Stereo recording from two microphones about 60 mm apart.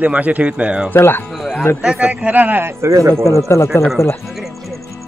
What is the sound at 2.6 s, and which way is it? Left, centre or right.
Speech, right.